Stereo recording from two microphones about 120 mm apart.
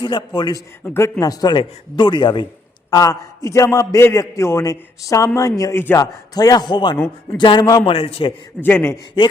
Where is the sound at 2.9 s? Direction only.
30° left (ahead or behind).